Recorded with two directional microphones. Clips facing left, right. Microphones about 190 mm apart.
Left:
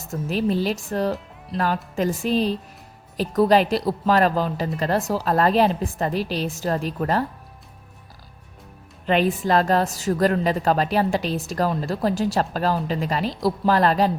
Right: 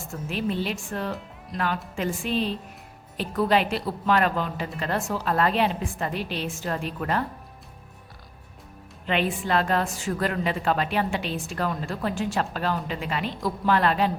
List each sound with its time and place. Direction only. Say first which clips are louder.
0.0 s a woman's voice: left 5 dB; 40° left (ahead or behind)
9.0 s a woman's voice: left 5 dB; 40° left (ahead or behind)